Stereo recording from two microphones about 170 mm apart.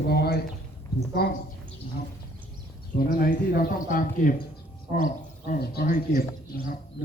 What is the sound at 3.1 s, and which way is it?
Speech, 55° left (ahead or behind).